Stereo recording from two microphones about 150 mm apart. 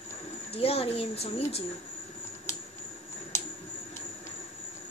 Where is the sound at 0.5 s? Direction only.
40° left (ahead or behind).